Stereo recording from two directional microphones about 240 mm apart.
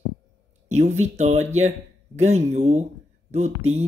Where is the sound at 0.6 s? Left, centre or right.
Right.